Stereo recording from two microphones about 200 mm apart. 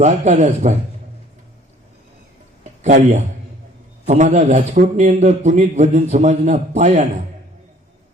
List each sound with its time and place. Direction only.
0.0 s a man's voice: 35° right (ahead or behind)
2.8 s a man's voice: 35° right (ahead or behind)